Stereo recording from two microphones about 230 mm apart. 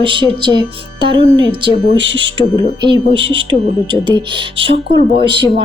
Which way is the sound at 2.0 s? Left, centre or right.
Right.